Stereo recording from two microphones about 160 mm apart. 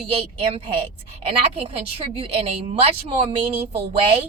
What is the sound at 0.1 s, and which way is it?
A woman's voice, 35° right (ahead or behind).